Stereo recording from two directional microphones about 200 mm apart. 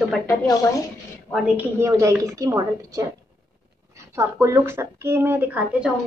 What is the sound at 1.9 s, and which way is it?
A woman's voice, 15° right (ahead or behind).